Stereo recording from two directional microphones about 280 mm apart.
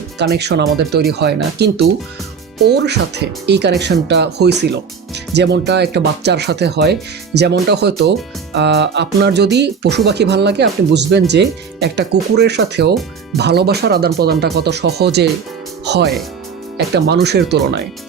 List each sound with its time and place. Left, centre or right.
0.2 s speech: right